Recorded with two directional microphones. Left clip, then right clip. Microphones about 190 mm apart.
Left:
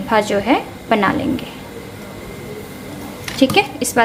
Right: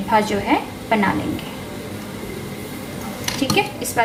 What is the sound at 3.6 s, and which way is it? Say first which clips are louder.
Speech: left 5 dB; 45° left (ahead or behind).